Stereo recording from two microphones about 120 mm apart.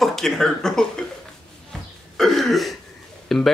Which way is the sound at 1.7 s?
Centre (ahead or behind).